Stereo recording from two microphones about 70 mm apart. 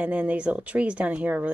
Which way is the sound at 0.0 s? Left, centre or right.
Right.